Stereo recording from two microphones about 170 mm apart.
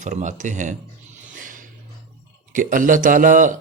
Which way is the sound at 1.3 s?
50° right (ahead or behind).